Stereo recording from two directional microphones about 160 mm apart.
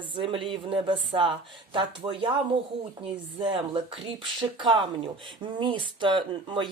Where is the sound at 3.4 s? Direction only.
30° right (ahead or behind).